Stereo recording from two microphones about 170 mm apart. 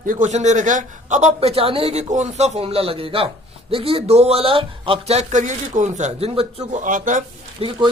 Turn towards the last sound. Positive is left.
turn(degrees=-35)  # may be behind; listen again after turning